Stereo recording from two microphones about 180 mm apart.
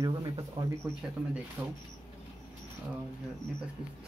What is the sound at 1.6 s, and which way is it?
Speech, 5° right (ahead or behind).